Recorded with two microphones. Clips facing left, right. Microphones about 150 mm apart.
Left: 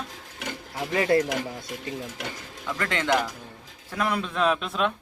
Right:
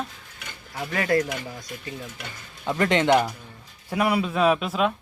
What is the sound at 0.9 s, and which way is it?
Speech, 25° left (ahead or behind).